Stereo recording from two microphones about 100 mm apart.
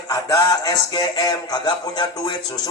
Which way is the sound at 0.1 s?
35° left (ahead or behind).